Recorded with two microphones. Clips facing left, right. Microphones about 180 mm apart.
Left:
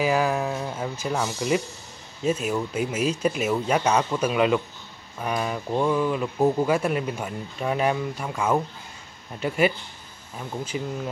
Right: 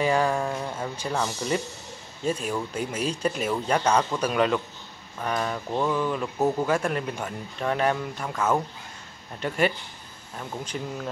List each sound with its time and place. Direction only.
0.0 s a sound: 5° left (ahead or behind)
1.0 s speech: 5° left (ahead or behind)
10.3 s speech: 5° left (ahead or behind)